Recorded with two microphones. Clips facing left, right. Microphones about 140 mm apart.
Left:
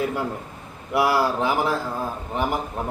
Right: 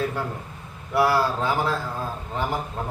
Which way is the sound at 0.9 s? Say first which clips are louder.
Left 1 dB; 15° left (ahead or behind).